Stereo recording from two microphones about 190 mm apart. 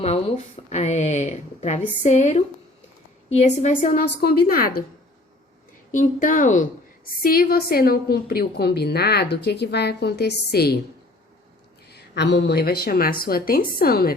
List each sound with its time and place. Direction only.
0.0 s a woman's voice: 35° left (ahead or behind); by 4.8 s 50° left (ahead or behind)
5.9 s a woman's voice: 45° left (ahead or behind)
11.9 s a woman's voice: 60° left (ahead or behind)